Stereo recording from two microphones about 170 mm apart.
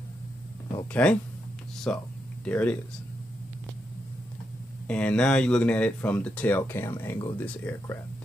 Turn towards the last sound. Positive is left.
turn(degrees=15)  # may be behind; listen again after turning